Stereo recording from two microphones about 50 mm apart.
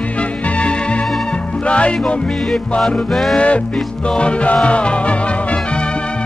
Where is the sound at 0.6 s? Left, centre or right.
Left.